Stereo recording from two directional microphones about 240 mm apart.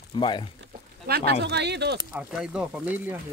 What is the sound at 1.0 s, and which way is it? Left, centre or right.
Speech, right.